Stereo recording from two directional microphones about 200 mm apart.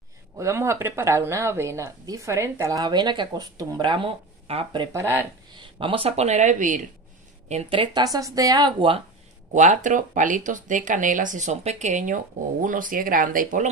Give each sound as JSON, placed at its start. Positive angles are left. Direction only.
{"t": 0.4, "sound": "speech", "side_deg": -15}
{"t": 4.9, "sound": "speech", "side_deg": -10}
{"t": 5.5, "sound": "speech", "side_deg": -25}
{"t": 9.5, "sound": "speech", "side_deg": -40}